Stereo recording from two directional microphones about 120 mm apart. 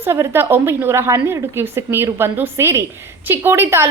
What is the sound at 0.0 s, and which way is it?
A woman's voice, 20° right (ahead or behind).